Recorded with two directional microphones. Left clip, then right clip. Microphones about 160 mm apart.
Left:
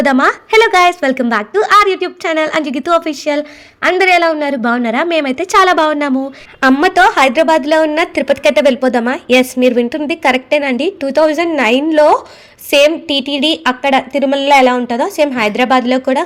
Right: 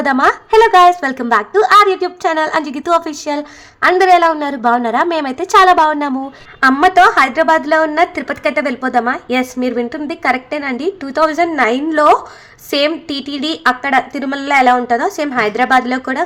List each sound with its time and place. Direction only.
0.0 s a woman's voice: 30° left (ahead or behind)
13.1 s a woman's voice: 20° left (ahead or behind)